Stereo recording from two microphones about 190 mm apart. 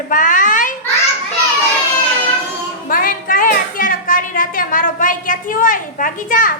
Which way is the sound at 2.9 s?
45° left (ahead or behind).